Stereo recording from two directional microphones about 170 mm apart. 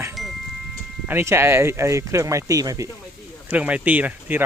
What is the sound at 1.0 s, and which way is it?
Speech, 15° right (ahead or behind).